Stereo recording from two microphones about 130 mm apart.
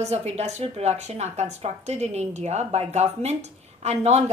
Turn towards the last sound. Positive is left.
turn(degrees=-55)  # may be behind; listen again after turning